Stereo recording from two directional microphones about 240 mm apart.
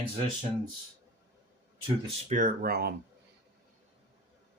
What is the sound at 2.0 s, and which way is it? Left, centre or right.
Speech, right.